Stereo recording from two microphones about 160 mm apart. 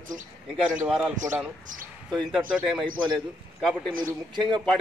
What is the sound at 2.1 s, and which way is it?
Speech, centre (ahead or behind).